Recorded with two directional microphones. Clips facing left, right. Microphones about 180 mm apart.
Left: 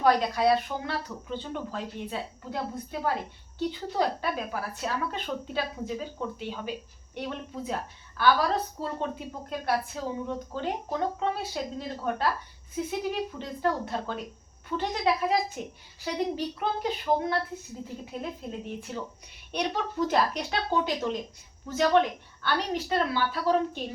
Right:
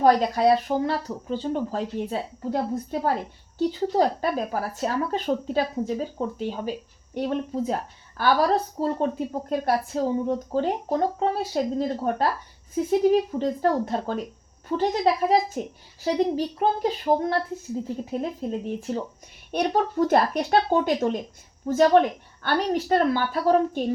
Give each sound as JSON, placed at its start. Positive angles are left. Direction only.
{"t": 0.0, "sound": "speech", "side_deg": -40}
{"t": 19.5, "sound": "a woman's voice", "side_deg": -50}